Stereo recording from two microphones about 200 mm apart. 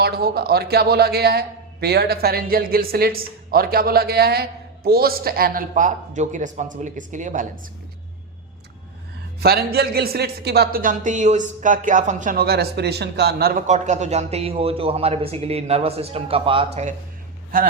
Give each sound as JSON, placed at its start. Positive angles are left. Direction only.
{"t": 0.0, "sound": "a man's voice", "side_deg": -50}
{"t": 9.4, "sound": "speech", "side_deg": -50}
{"t": 17.5, "sound": "a man's voice", "side_deg": -45}